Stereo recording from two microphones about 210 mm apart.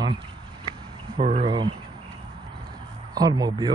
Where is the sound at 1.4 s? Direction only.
25° right (ahead or behind).